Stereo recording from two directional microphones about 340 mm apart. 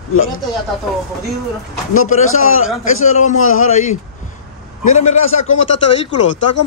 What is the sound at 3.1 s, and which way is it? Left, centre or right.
Speech, centre.